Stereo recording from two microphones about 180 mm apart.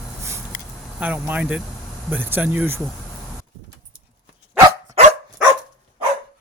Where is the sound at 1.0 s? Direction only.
10° right (ahead or behind).